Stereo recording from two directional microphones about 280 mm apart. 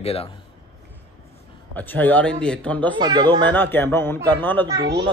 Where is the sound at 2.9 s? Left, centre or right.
Centre.